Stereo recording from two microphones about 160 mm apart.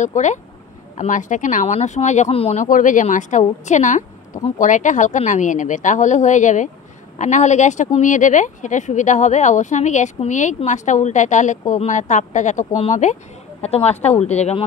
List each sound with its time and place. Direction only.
0.0 s speech: 50° left (ahead or behind)